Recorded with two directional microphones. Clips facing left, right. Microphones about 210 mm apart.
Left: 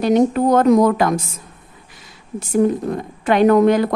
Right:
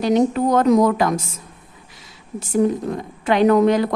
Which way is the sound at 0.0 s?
50° left (ahead or behind).